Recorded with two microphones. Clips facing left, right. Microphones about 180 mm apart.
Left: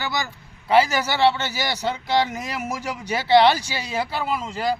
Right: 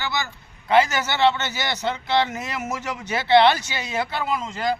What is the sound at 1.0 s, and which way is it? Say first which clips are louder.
Speech: left 1 dB; 10° left (ahead or behind).